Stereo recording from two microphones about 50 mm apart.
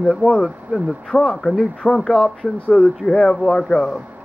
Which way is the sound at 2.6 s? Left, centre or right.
Left.